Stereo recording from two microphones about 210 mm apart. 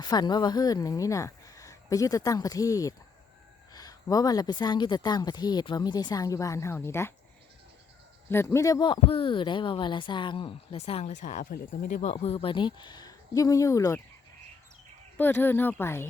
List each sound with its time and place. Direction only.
0.0 s speech: 20° left (ahead or behind)
8.3 s speech: 10° left (ahead or behind)
15.2 s speech: 10° left (ahead or behind)